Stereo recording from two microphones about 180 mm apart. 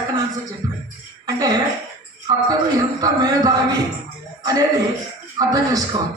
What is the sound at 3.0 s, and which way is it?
A man's voice, 20° right (ahead or behind).